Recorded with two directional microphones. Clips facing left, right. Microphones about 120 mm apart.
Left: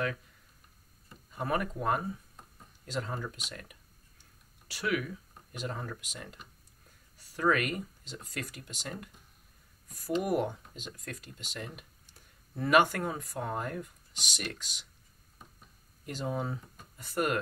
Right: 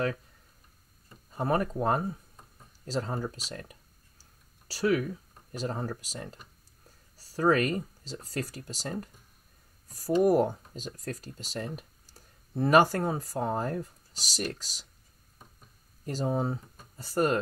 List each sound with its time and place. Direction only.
1.3 s speech: 35° right (ahead or behind)
16.1 s speech: 35° right (ahead or behind)